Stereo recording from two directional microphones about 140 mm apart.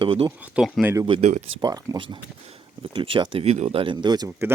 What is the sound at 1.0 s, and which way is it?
Speech, 40° right (ahead or behind).